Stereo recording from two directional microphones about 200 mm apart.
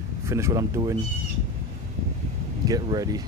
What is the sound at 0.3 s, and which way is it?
Speech, 15° right (ahead or behind).